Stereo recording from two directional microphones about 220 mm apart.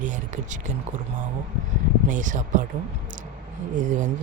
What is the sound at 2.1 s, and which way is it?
Speech, 35° right (ahead or behind).